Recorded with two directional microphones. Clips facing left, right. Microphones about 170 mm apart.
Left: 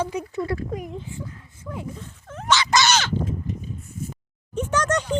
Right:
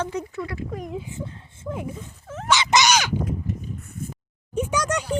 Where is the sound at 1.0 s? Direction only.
25° right (ahead or behind); by 2.5 s 5° right (ahead or behind).